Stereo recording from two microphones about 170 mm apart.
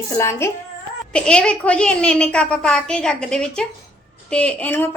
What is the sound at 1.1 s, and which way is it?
A woman's voice, 5° left (ahead or behind).